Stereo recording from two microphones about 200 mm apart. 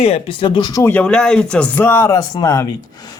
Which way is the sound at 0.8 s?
10° left (ahead or behind).